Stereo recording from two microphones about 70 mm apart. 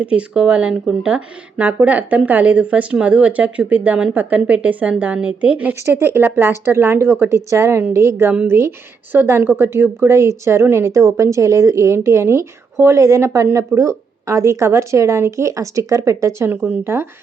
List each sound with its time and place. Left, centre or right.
0.0 s speech: centre
5.8 s a woman's voice: right
8.3 s a woman's voice: right
16.5 s a woman's voice: right